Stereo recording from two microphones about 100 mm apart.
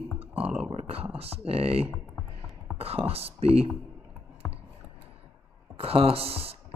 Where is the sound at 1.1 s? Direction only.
80° right.